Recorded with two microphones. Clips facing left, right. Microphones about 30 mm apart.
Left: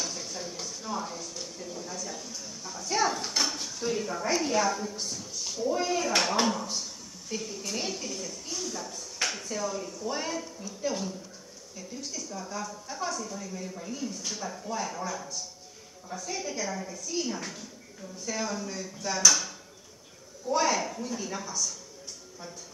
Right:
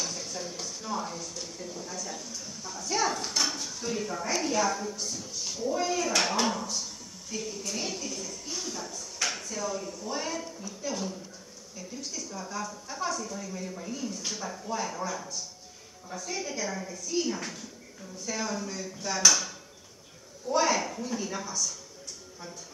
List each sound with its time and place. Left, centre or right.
0.0 s speech: centre
5.7 s a woman's voice: centre
6.4 s a woman's voice: centre
8.5 s speech: centre
9.4 s speech: centre
10.4 s a woman's voice: centre